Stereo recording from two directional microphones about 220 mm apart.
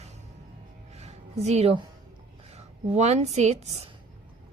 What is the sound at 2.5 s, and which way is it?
A woman's voice, 30° right (ahead or behind).